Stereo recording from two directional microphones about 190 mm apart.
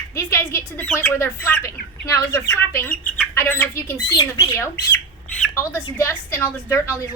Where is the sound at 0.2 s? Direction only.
15° left (ahead or behind).